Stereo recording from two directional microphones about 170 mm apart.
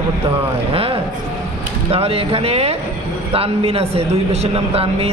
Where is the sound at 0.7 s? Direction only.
35° right (ahead or behind).